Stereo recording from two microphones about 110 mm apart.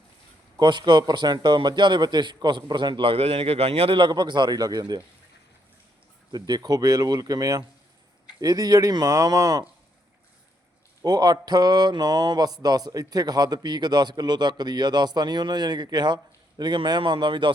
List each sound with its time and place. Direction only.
0.6 s a man's voice: 45° right (ahead or behind)
6.3 s speech: 40° right (ahead or behind)
11.0 s speech: 35° right (ahead or behind)